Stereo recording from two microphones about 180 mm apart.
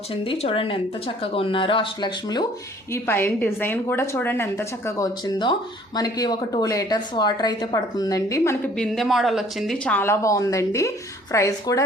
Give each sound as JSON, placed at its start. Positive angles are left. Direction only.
{"t": 0.1, "sound": "a woman's voice", "side_deg": 30}
{"t": 2.9, "sound": "a woman's voice", "side_deg": 10}
{"t": 8.7, "sound": "speech", "side_deg": 5}